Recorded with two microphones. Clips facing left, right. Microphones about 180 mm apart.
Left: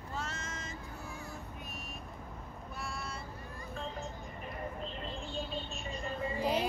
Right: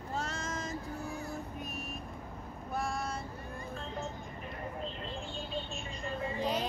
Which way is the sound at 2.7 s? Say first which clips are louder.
Right 8 dB; 45° right (ahead or behind).